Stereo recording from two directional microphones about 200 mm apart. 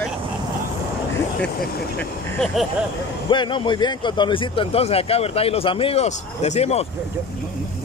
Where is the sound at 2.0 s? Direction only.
5° left (ahead or behind).